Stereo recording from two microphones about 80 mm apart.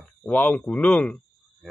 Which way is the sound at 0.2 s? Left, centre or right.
Centre.